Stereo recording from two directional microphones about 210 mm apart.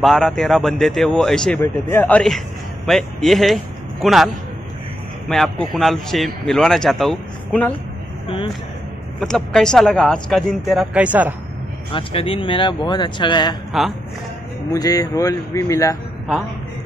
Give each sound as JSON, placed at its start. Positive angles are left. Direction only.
{"t": 0.0, "sound": "a man's voice", "side_deg": 0}
{"t": 5.3, "sound": "a man's voice", "side_deg": 0}
{"t": 8.3, "sound": "vehicle", "side_deg": 25}
{"t": 9.2, "sound": "a man's voice", "side_deg": 0}
{"t": 11.9, "sound": "speech", "side_deg": 25}
{"t": 14.7, "sound": "speech", "side_deg": 15}